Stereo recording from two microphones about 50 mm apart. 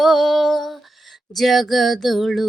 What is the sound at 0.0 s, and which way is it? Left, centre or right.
Lullaby, centre.